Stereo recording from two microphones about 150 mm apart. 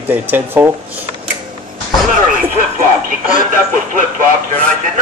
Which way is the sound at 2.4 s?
60° right (ahead or behind).